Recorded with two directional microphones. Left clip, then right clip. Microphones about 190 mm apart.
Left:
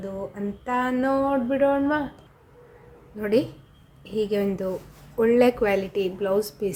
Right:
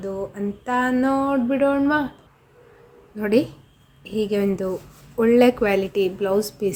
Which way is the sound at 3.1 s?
20° right (ahead or behind).